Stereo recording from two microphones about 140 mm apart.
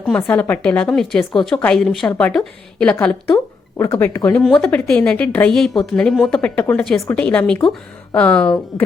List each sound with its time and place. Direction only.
0.2 s a woman's voice: 15° left (ahead or behind)
4.4 s a woman's voice: 5° left (ahead or behind)